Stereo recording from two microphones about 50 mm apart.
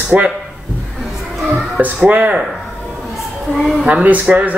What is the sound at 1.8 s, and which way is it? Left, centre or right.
Speech, right.